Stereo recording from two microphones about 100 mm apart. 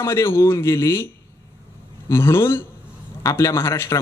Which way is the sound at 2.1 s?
25° left (ahead or behind).